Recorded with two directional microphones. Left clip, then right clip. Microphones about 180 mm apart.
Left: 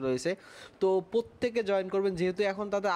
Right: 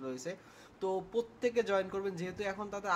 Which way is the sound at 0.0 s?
45° left (ahead or behind).